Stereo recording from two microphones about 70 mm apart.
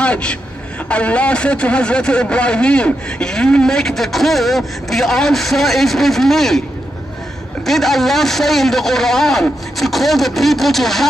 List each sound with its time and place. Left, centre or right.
0.0 s a man's voice: centre
7.6 s a man's voice: centre